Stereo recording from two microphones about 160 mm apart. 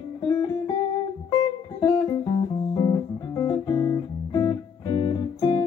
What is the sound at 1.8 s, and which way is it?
Music, 25° left (ahead or behind).